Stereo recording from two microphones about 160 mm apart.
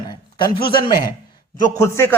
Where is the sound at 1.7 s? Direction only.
15° left (ahead or behind).